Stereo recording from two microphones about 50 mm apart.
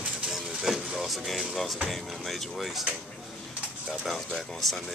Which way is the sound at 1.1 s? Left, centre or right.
Centre.